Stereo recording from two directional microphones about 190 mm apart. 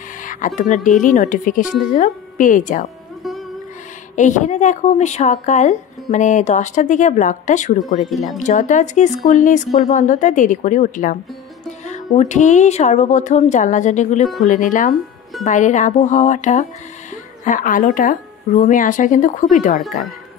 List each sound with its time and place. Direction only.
0.2 s a sound: 45° left (ahead or behind)
0.8 s speech: 40° left (ahead or behind)
4.1 s a woman's voice: 40° left (ahead or behind)
7.8 s speech: centre (ahead or behind)
8.4 s a woman's voice: 40° left (ahead or behind)